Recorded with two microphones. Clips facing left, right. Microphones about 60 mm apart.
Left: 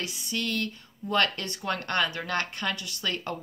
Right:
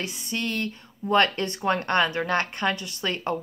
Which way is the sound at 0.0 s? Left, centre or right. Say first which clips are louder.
Right 2 dB; right.